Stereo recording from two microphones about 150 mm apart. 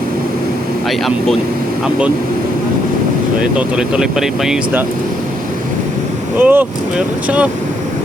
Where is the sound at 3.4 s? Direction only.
5° right (ahead or behind).